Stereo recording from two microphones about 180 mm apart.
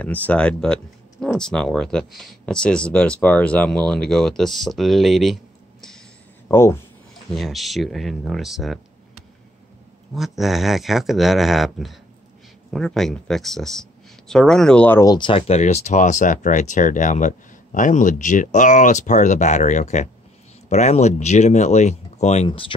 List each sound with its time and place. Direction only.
0.0 s speech: 10° left (ahead or behind)
6.5 s speech: 15° left (ahead or behind)
7.2 s speech: centre (ahead or behind)
10.1 s speech: centre (ahead or behind); by 22.5 s 40° left (ahead or behind)
22.5 s speech: 30° left (ahead or behind)